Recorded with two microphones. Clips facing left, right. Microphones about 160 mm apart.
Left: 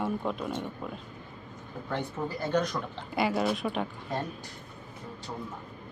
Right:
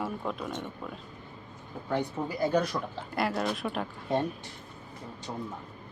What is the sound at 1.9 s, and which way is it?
Speech, 10° right (ahead or behind).